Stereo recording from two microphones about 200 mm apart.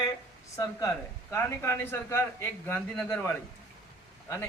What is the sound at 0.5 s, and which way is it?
A man's voice, 15° left (ahead or behind).